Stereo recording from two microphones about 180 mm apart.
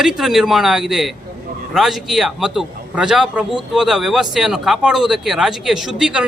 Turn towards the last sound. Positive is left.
turn(degrees=-5)  # may be behind; listen again after turning